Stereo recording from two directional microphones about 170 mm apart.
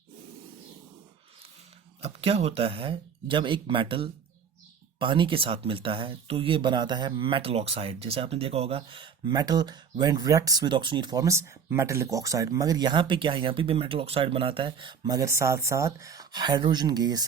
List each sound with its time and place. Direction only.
2.0 s speech: 35° right (ahead or behind)